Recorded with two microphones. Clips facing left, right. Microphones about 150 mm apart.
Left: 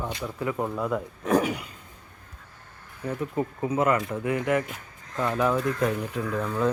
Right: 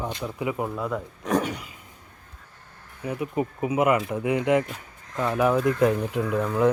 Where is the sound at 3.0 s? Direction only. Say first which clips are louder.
Right 1 dB; 10° right (ahead or behind).